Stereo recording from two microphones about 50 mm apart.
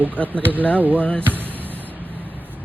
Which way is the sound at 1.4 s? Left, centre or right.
Right.